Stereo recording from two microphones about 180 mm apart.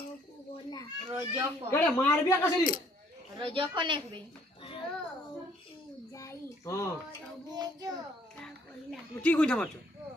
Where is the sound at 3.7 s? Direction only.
25° right (ahead or behind).